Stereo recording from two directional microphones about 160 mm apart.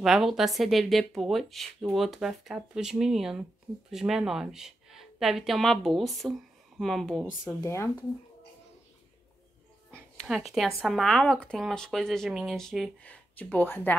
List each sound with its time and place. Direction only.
0.0 s speech: centre (ahead or behind)
7.4 s speech: 15° left (ahead or behind)
9.8 s a sound: 5° left (ahead or behind)
10.2 s speech: centre (ahead or behind)